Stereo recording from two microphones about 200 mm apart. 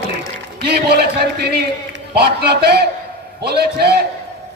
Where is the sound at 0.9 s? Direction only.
55° right (ahead or behind).